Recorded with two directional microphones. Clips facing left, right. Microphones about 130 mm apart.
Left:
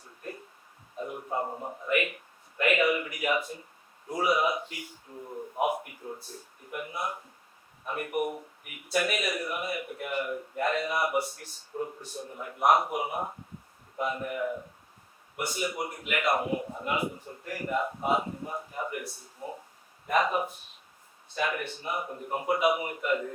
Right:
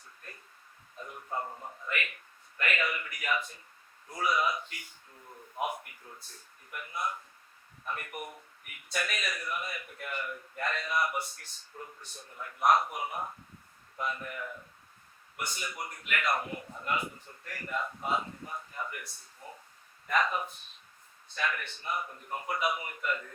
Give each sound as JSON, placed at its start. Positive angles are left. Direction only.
{"t": 0.9, "sound": "a sound", "side_deg": 20}
{"t": 1.5, "sound": "a man's voice", "side_deg": 35}
{"t": 1.9, "sound": "a man's voice", "side_deg": 15}
{"t": 5.5, "sound": "a sound", "side_deg": 15}
{"t": 6.7, "sound": "a man's voice", "side_deg": 20}
{"t": 11.1, "sound": "a man's voice", "side_deg": 10}
{"t": 15.7, "sound": "a man's voice", "side_deg": 25}
{"t": 20.1, "sound": "a man's voice", "side_deg": 20}